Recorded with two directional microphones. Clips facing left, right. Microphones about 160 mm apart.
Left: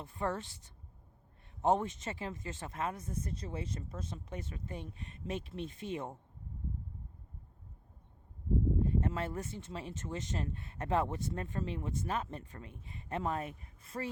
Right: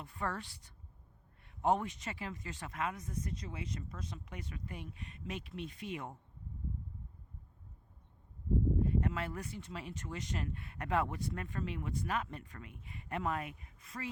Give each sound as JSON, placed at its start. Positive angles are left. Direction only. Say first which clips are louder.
{"t": 0.0, "sound": "speech", "louder": "left 3 dB", "side_deg": 25}
{"t": 8.9, "sound": "speech", "louder": "left 1 dB", "side_deg": 30}